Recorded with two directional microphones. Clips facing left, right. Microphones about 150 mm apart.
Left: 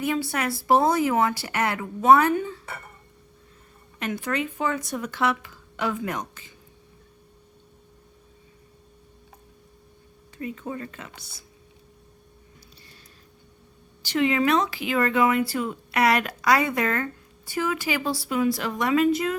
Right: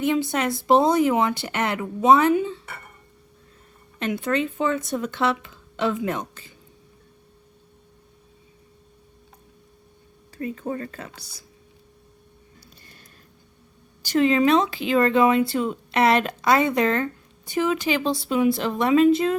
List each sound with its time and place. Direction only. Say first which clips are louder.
0.0 s speech: right 4 dB; 20° right (ahead or behind)
4.0 s speech: right 4 dB; 25° right (ahead or behind)
10.3 s speech: right 4 dB; 40° right (ahead or behind)
14.0 s speech: right 4 dB; 40° right (ahead or behind)